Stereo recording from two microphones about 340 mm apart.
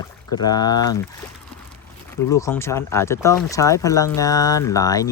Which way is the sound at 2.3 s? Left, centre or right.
Centre.